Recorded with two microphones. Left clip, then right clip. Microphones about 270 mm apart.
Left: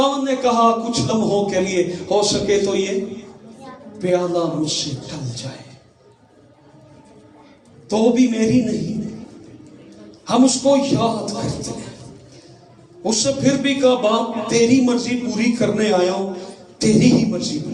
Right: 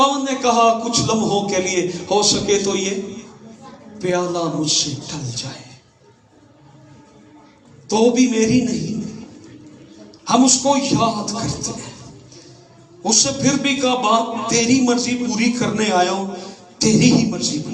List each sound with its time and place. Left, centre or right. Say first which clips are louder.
0.0 s a man's voice: right 1 dB; right
3.9 s a man's voice: left 2 dB; right
7.9 s a man's voice: right 1 dB; right
10.2 s a man's voice: even; right
13.0 s a man's voice: right 1 dB; right